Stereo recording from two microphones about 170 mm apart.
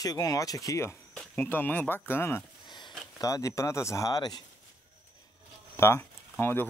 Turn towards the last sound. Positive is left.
turn(degrees=10)  # may be behind; listen again after turning